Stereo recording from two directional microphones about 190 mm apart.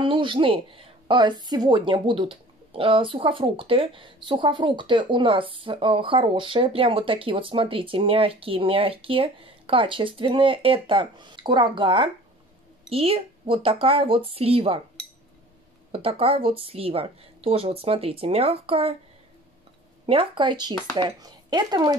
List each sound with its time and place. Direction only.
0.0 s a woman's voice: 25° right (ahead or behind)
15.9 s speech: 30° right (ahead or behind)
20.1 s speech: 25° right (ahead or behind)